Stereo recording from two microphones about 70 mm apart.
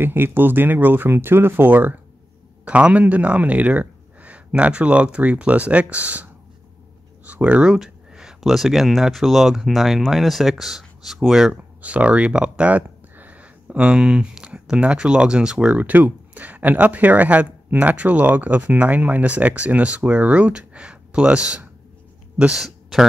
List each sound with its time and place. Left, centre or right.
0.0 s speech: right
2.6 s speech: centre
7.4 s speech: centre
11.8 s speech: centre